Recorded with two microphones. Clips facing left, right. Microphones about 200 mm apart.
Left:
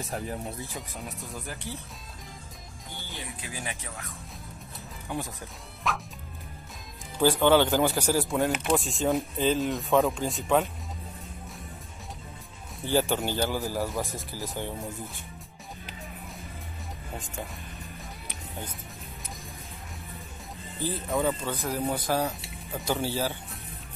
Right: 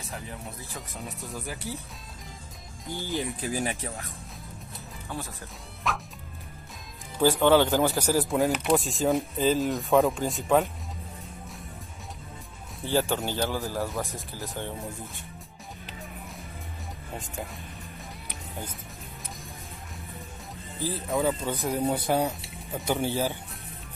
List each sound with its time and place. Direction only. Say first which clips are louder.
0.0 s speech: left 6 dB; 45° left (ahead or behind)
0.7 s speech: even; centre (ahead or behind)
3.4 s speech: right 8 dB; 40° right (ahead or behind)
5.1 s speech: left 3 dB; 15° left (ahead or behind)
5.9 s speech: even; centre (ahead or behind)
7.2 s speech: right 1 dB; centre (ahead or behind)
12.8 s speech: left 1 dB; centre (ahead or behind)
20.8 s speech: right 1 dB; centre (ahead or behind)